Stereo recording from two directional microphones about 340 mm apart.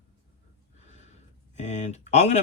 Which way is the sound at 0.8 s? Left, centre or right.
Centre.